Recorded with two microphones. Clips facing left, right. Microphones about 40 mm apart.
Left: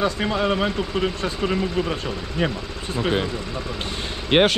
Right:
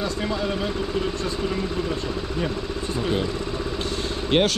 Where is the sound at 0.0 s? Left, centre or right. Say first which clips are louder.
Left 4 dB; left.